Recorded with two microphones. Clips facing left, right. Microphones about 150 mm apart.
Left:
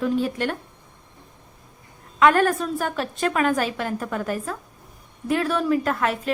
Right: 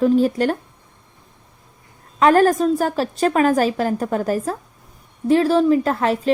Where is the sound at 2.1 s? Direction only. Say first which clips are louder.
Right 4 dB; 40° right (ahead or behind).